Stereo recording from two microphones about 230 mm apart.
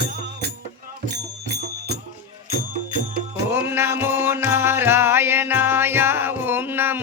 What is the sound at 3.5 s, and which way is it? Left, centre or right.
Music, centre.